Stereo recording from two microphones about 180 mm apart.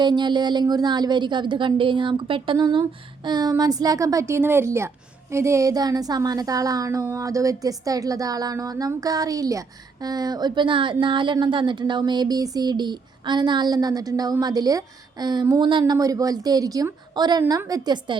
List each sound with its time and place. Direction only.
0.0 s speech: 25° right (ahead or behind)